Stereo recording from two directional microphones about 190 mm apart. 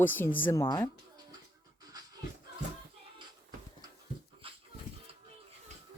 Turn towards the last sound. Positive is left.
turn(degrees=-30)  # may be behind; listen again after turning